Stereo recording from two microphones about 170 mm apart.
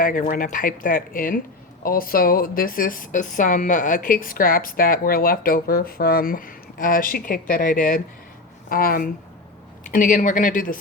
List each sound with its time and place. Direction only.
0.0 s speech: 55° left (ahead or behind)